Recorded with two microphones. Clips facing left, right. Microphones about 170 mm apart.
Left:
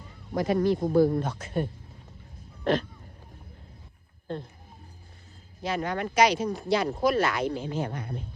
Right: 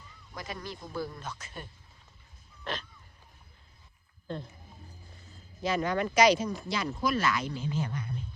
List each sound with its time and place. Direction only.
0.0 s speech: 55° left (ahead or behind)
5.6 s speech: 55° left (ahead or behind)